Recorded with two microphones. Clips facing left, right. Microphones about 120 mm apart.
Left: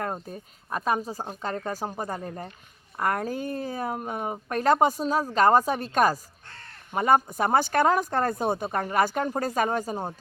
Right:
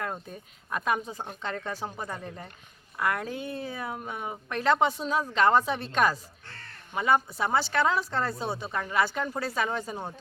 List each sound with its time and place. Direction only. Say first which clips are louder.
0.0 s speech: left 3 dB; 40° left (ahead or behind)